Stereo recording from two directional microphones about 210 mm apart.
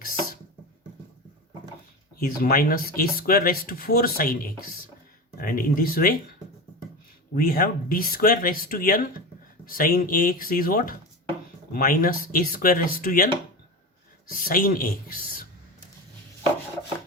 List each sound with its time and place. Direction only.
0.0 s a sound: 45° left (ahead or behind)
2.1 s speech: 45° left (ahead or behind)
7.3 s speech: 45° left (ahead or behind)